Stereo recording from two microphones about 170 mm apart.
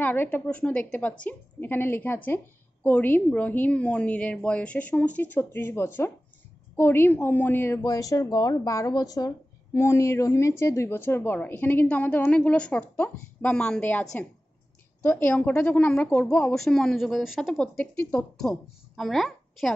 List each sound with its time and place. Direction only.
0.0 s a woman's voice: 10° left (ahead or behind)